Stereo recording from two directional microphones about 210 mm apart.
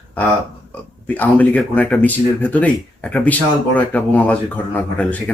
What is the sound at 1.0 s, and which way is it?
Speech, 10° left (ahead or behind).